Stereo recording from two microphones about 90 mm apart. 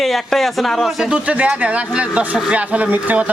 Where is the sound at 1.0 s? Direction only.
15° right (ahead or behind).